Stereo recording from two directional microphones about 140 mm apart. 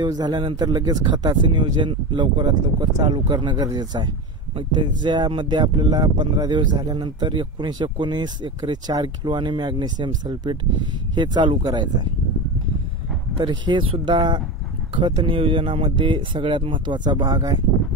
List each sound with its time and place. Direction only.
0.0 s speech: 30° right (ahead or behind)
13.4 s speech: 35° right (ahead or behind)